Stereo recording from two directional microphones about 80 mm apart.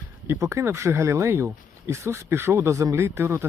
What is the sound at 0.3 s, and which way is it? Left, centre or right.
Speech, right.